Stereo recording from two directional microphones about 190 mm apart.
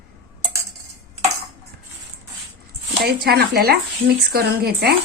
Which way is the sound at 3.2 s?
55° right (ahead or behind).